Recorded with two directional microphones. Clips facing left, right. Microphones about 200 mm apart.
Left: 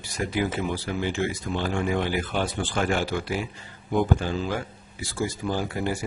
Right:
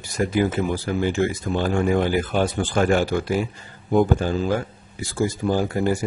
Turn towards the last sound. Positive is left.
turn(degrees=-45)  # may be behind; listen again after turning